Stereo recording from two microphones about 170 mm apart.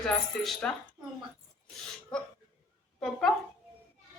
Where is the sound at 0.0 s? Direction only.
5° left (ahead or behind).